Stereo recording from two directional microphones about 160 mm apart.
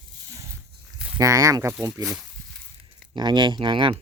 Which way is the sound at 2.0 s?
Centre (ahead or behind).